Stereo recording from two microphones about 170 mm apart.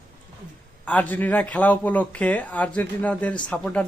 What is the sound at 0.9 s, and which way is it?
Speech, 10° left (ahead or behind).